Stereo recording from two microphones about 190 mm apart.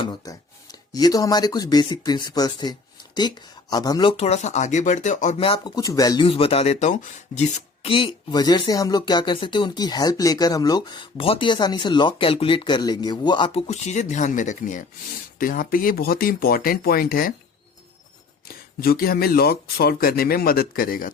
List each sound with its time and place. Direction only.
0.0 s speech: 20° left (ahead or behind)
4.2 s speech: 35° left (ahead or behind)
5.4 s speech: 25° left (ahead or behind)
7.9 s speech: 25° left (ahead or behind); by 17.3 s 50° left (ahead or behind)
18.4 s speech: 55° left (ahead or behind)